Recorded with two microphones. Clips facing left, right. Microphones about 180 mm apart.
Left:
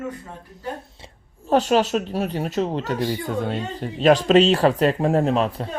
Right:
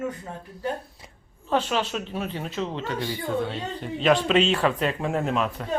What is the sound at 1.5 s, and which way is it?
Speech, 40° left (ahead or behind).